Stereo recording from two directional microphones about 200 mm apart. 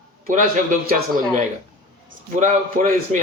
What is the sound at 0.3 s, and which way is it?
A man's voice, 40° right (ahead or behind).